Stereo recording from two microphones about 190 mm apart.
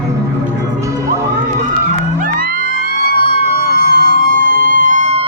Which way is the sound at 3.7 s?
50° right (ahead or behind).